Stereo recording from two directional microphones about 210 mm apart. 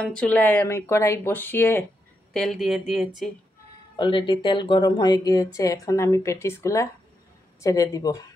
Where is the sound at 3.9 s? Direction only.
20° left (ahead or behind).